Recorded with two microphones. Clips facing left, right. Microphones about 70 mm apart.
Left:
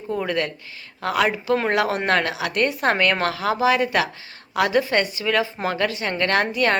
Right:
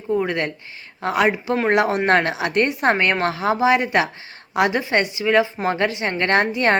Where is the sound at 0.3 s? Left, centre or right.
Right.